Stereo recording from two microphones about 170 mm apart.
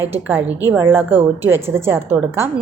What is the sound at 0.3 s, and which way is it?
A woman's voice, 10° right (ahead or behind).